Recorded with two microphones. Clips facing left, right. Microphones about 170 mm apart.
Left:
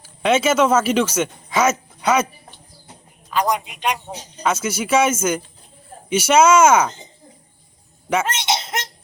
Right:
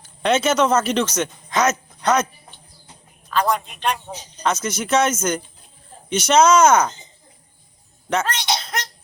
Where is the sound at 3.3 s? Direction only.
15° left (ahead or behind).